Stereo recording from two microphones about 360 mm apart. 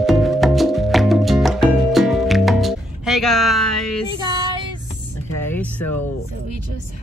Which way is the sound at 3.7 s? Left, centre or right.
Left.